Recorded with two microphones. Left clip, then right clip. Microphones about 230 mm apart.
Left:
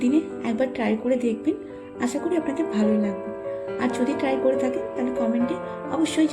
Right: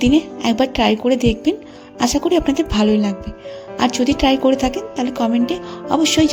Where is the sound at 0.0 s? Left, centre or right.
Right.